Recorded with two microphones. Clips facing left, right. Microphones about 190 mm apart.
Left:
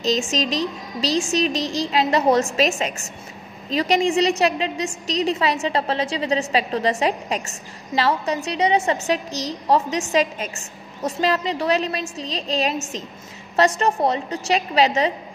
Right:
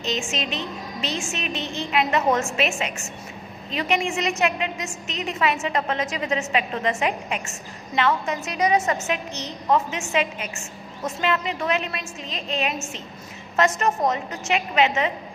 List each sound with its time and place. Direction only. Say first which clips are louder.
0.0 s a woman's voice: left 6 dB; 40° left (ahead or behind)